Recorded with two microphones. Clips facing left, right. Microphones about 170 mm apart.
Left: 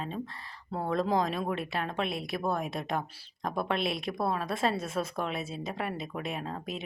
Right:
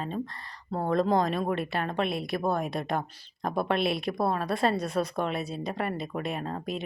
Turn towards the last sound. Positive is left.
turn(degrees=0)  # may be behind; listen again after turning